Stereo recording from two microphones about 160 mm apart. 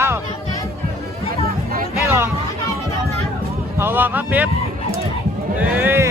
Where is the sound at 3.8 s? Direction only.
10° right (ahead or behind).